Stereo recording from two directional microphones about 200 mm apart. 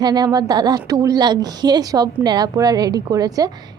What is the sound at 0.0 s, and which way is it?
A woman's voice, 20° right (ahead or behind).